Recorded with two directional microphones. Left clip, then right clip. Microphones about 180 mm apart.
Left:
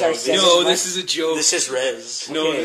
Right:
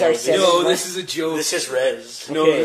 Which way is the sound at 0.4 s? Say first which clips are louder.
Left 1 dB; 50° left (ahead or behind).